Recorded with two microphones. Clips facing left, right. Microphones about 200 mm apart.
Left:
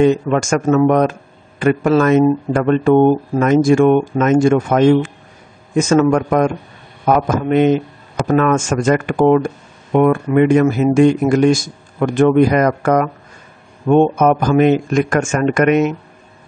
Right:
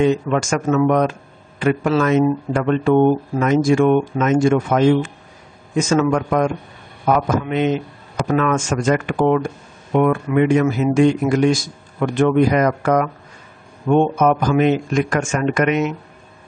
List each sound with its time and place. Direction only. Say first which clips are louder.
0.0 s speech: left 3 dB; 50° left (ahead or behind)